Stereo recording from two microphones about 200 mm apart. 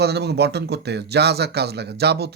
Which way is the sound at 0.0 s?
55° right (ahead or behind).